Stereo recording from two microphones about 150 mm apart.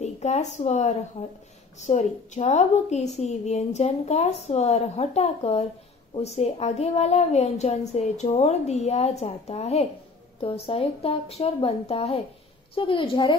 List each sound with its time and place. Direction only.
0.0 s a woman's voice: 50° left (ahead or behind); by 13.4 s 35° left (ahead or behind)